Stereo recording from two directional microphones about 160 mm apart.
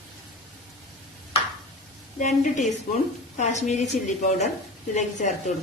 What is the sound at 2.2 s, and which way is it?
A man's voice, 50° left (ahead or behind).